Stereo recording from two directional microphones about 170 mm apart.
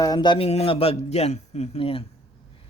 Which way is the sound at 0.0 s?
25° left (ahead or behind).